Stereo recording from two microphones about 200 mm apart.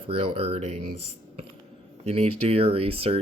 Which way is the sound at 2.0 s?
30° right (ahead or behind).